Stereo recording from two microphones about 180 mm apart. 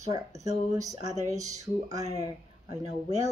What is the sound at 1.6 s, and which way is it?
Speech, 20° right (ahead or behind).